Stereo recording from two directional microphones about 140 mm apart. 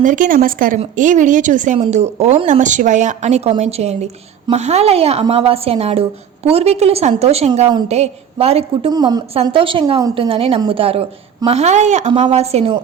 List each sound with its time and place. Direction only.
0.0 s a woman's voice: 65° right (ahead or behind)
0.9 s speech: 65° right (ahead or behind)
1.8 s a woman's voice: 50° right (ahead or behind)
8.9 s a woman's voice: 30° right (ahead or behind)
9.3 s a woman's voice: 40° right (ahead or behind)
12.1 s a woman's voice: 45° right (ahead or behind)